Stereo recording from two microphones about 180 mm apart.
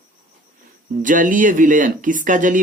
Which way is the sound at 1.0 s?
45° right (ahead or behind).